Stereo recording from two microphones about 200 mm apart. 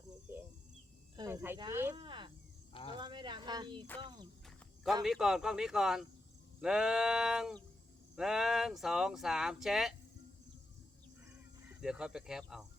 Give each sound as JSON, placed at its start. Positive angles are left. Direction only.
{"t": 0.3, "sound": "a sound", "side_deg": -10}
{"t": 1.1, "sound": "cricket", "side_deg": -15}
{"t": 1.5, "sound": "speech", "side_deg": -15}
{"t": 2.0, "sound": "insect", "side_deg": -25}
{"t": 2.9, "sound": "a sound", "side_deg": -25}
{"t": 4.4, "sound": "cricket", "side_deg": 0}
{"t": 5.0, "sound": "speech", "side_deg": 0}
{"t": 11.3, "sound": "speech", "side_deg": -5}